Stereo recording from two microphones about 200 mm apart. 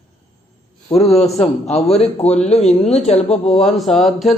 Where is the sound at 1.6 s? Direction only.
30° left (ahead or behind).